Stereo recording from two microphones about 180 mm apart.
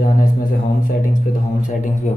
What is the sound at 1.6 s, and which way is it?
Speech, 45° left (ahead or behind).